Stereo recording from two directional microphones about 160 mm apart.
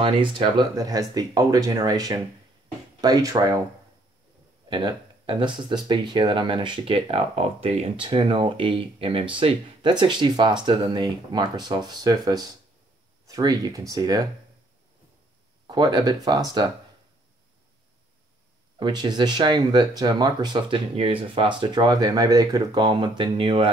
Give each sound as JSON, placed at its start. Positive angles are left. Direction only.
{"t": 0.0, "sound": "speech", "side_deg": -30}
{"t": 4.6, "sound": "speech", "side_deg": -30}
{"t": 15.6, "sound": "speech", "side_deg": -30}
{"t": 18.8, "sound": "speech", "side_deg": -25}